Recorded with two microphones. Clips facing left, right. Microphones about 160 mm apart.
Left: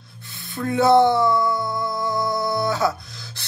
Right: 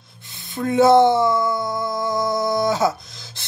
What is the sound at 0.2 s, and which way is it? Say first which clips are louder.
A woman's voice: right 2 dB; 20° right (ahead or behind).